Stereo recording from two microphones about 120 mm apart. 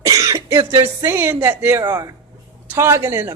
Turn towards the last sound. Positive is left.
turn(degrees=-25)  # may be behind; listen again after turning